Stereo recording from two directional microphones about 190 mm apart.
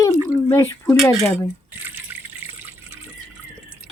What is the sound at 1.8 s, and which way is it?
Water, 10° right (ahead or behind).